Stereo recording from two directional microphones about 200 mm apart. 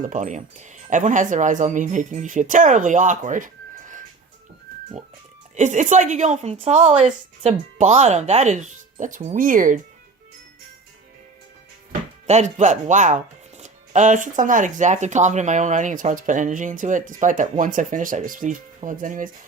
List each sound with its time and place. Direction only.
0.0 s speech: 40° right (ahead or behind)
5.5 s speech: 35° right (ahead or behind)
12.3 s speech: 35° right (ahead or behind)